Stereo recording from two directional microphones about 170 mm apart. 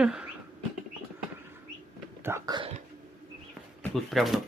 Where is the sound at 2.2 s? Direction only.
15° right (ahead or behind).